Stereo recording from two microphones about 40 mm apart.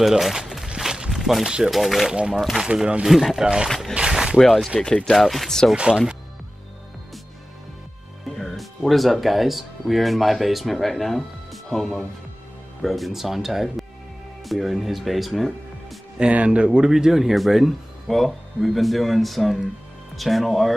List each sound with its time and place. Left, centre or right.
0.0 s speech: centre
0.7 s a sound: centre
1.1 s a sound: centre
1.4 s speech: centre
1.7 s speech: centre
2.0 s speech: right
3.1 s speech: centre
4.1 s a sound: centre
4.4 s speech: centre
5.8 s speech: right
8.4 s speech: centre
16.2 s speech: right
16.9 s speech: centre